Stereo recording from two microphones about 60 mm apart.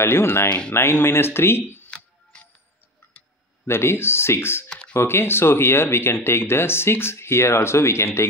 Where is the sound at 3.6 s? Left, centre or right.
Left.